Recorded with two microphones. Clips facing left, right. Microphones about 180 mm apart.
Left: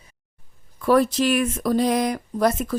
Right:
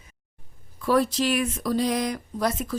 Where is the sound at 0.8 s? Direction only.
55° left (ahead or behind).